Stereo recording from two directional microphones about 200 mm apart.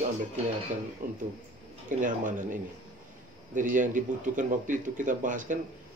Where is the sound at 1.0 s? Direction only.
40° right (ahead or behind).